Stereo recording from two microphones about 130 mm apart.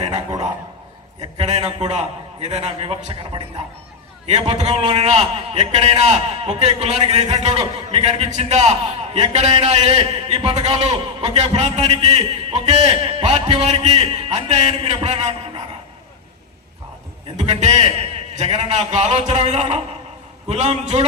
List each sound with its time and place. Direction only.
1.4 s a man's voice: 55° right (ahead or behind)
4.3 s a man's voice: 55° right (ahead or behind)
9.9 s a man's voice: 40° right (ahead or behind)
15.0 s a man's voice: 55° right (ahead or behind)
17.3 s a man's voice: 60° right (ahead or behind)
17.7 s a man's voice: 45° right (ahead or behind)